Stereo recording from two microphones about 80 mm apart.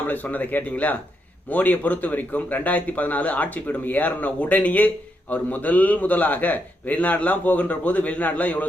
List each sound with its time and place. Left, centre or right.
0.1 s a man's voice: left